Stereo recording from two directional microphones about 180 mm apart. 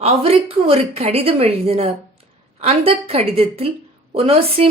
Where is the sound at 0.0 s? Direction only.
35° right (ahead or behind).